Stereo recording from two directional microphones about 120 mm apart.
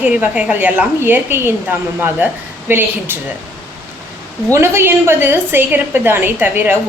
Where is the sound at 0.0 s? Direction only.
15° right (ahead or behind).